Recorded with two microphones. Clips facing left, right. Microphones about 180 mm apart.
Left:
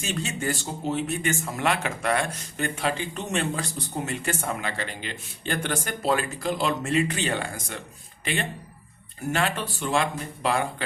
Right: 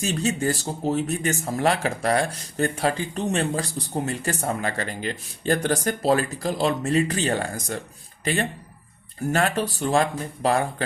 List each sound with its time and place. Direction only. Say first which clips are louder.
0.0 s speech: right 5 dB; 40° right (ahead or behind)